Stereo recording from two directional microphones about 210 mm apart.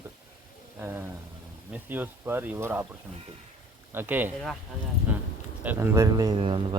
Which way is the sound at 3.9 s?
10° right (ahead or behind).